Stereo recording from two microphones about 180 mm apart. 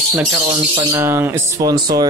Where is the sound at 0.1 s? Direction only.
10° right (ahead or behind).